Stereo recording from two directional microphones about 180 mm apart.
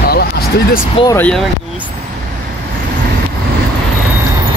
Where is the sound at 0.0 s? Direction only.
60° left (ahead or behind).